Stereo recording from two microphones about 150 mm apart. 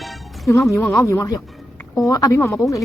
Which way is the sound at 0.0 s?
Centre (ahead or behind).